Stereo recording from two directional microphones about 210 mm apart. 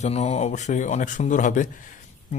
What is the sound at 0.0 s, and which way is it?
A man's voice, 30° left (ahead or behind).